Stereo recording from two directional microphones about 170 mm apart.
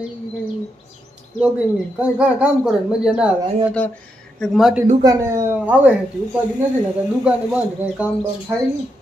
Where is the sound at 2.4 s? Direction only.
5° right (ahead or behind).